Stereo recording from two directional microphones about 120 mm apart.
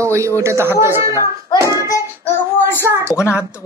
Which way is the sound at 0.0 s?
25° right (ahead or behind).